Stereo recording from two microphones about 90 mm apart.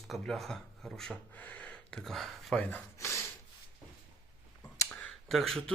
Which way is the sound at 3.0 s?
30° left (ahead or behind).